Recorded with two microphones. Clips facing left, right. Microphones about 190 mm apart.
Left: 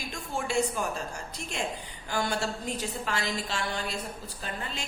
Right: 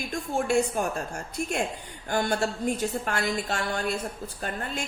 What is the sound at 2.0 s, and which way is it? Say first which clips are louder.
A woman's voice: right 4 dB; 50° right (ahead or behind).